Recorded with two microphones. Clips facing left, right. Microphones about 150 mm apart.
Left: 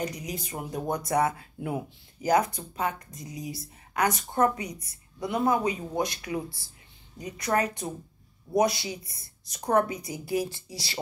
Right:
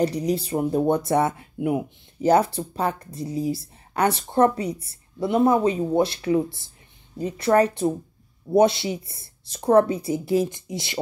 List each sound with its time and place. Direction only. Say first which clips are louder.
0.0 s speech: right 11 dB; 35° right (ahead or behind)